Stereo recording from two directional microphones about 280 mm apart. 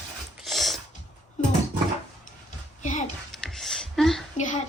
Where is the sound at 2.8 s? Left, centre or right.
Left.